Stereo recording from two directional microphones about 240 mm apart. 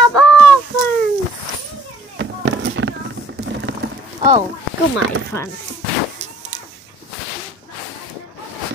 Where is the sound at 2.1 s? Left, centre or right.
Right.